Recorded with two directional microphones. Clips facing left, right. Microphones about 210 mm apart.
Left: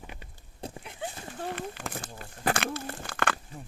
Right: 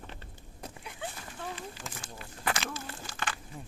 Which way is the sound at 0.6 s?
30° left (ahead or behind).